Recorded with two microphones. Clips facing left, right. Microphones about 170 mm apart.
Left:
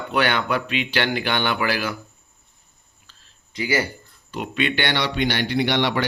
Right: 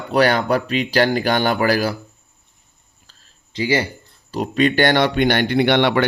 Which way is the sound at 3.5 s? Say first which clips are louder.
Right 4 dB; 25° right (ahead or behind).